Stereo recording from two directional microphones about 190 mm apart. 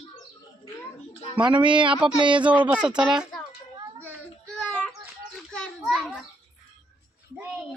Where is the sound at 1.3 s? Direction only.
25° right (ahead or behind).